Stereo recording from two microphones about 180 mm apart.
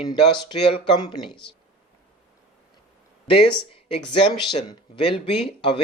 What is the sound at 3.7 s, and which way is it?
Speech, 30° left (ahead or behind).